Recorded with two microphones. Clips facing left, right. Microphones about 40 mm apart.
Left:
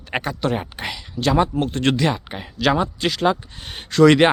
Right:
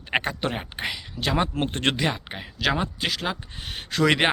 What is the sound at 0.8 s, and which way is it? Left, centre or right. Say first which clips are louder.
Speech: left 2 dB; centre.